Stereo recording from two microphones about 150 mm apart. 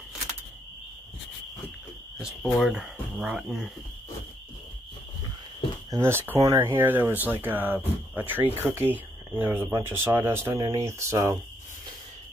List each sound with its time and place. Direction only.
2.4 s speech: centre (ahead or behind)
5.9 s speech: 15° right (ahead or behind)